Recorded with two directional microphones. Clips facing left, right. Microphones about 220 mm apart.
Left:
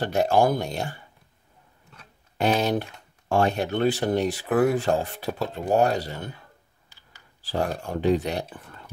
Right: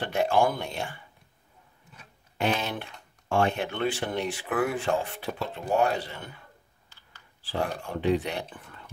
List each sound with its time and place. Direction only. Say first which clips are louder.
0.0 s speech: left 3 dB; 40° left (ahead or behind)
2.3 s speech: left 6 dB; 40° left (ahead or behind)
7.4 s speech: left 3 dB; 40° left (ahead or behind)